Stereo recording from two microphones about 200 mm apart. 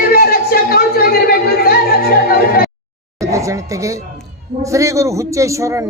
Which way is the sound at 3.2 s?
15° right (ahead or behind).